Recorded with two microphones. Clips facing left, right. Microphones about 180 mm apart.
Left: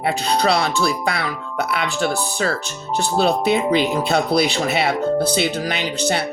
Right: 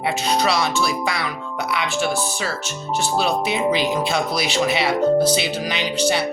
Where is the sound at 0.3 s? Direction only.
60° left (ahead or behind).